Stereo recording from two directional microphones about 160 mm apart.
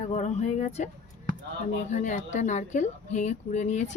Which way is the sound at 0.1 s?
45° left (ahead or behind).